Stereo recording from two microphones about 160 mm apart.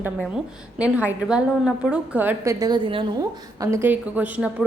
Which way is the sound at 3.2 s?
20° right (ahead or behind).